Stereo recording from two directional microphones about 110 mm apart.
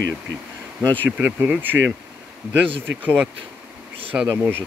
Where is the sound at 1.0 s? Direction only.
15° right (ahead or behind).